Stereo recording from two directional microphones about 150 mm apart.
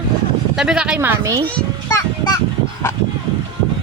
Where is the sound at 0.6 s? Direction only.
5° right (ahead or behind).